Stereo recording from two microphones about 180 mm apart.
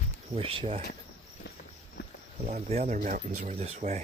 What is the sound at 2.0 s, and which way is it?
Cricket, 70° left (ahead or behind).